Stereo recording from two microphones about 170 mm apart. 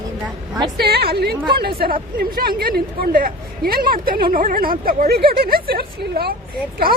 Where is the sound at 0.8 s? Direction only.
70° right (ahead or behind).